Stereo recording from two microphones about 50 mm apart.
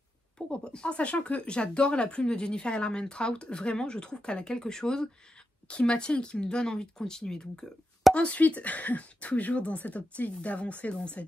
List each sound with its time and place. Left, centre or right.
0.5 s speech: centre
8.1 s speech: left